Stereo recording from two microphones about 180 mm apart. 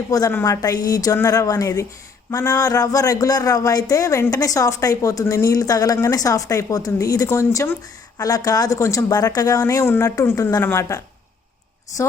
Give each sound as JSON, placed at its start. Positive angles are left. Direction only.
{"t": 0.1, "sound": "a man's voice", "side_deg": 20}